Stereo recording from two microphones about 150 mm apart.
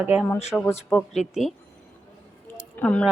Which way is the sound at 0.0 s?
10° right (ahead or behind).